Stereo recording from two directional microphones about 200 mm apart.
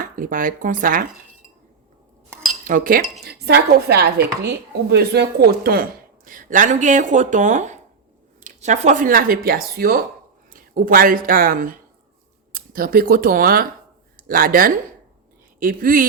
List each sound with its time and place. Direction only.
0.0 s chopping: 45° right (ahead or behind)
2.6 s chopping: 40° right (ahead or behind)
6.2 s speech: 40° right (ahead or behind)
8.4 s chopping: 40° right (ahead or behind)
12.5 s speech: 45° right (ahead or behind)
14.3 s chopping: 45° right (ahead or behind)